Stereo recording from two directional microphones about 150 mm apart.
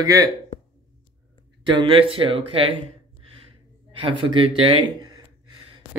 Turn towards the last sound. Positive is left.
turn(degrees=-30)  # may be behind; listen again after turning